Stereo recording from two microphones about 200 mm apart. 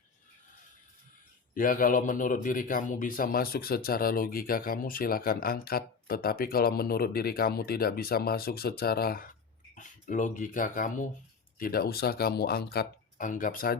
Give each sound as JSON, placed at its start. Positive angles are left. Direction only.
{"t": 1.5, "sound": "a man's voice", "side_deg": 45}